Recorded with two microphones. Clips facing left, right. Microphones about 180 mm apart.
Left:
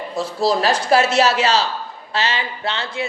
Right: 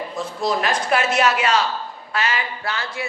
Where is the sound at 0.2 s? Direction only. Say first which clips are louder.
Left 5 dB; 35° left (ahead or behind).